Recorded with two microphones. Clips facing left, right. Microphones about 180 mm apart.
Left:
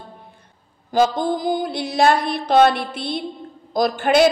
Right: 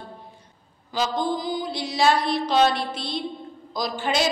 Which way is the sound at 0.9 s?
50° left (ahead or behind).